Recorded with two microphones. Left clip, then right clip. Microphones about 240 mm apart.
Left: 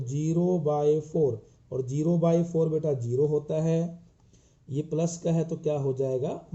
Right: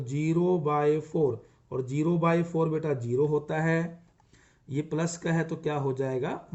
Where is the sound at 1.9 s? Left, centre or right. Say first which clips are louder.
Left 1 dB; right.